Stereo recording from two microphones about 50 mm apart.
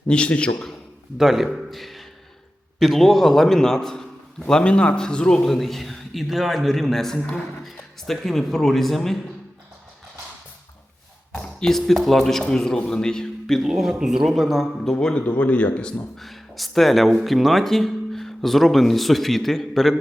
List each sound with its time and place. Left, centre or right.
0.1 s speech: left
1.2 s a man's voice: centre
11.3 s a man's voice: centre
13.6 s a man's voice: centre
14.9 s speech: left
16.1 s a man's voice: centre